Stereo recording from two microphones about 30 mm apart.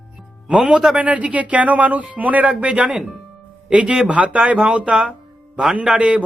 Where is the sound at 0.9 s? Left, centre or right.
Right.